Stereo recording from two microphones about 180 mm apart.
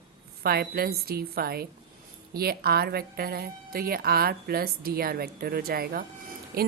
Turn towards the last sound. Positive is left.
turn(degrees=-55)  # may be behind; listen again after turning